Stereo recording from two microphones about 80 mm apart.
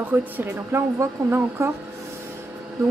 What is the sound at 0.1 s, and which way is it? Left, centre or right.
Speech, right.